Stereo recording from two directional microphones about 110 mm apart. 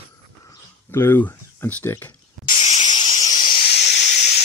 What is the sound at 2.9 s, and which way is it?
Steam, 40° left (ahead or behind).